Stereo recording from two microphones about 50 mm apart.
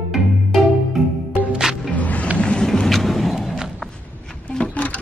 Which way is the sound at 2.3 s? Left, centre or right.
Centre.